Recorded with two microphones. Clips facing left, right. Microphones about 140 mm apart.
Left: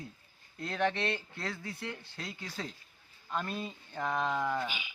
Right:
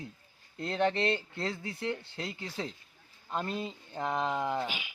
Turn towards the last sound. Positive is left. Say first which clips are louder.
# right 1 dB
turn(degrees=-25)  # may be behind; listen again after turning